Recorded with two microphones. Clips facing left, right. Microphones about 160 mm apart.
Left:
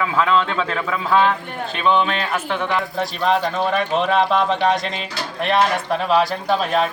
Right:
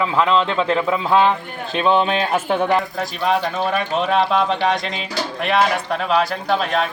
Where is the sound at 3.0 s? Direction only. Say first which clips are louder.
Left 1 dB; 5° right (ahead or behind).